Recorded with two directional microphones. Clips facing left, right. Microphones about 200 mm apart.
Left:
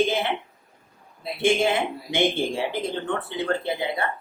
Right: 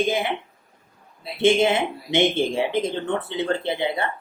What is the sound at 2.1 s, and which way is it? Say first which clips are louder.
Speech: right 3 dB; 20° right (ahead or behind).